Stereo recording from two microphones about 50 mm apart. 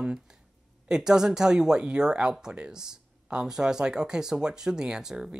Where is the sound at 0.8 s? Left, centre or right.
Centre.